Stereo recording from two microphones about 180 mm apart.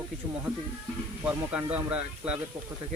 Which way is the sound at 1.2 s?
5° right (ahead or behind).